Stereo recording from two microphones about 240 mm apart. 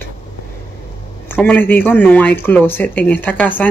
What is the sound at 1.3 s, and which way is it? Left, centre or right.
Speech, centre.